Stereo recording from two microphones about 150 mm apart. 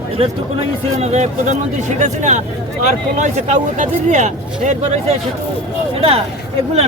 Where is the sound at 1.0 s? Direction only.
45° right (ahead or behind).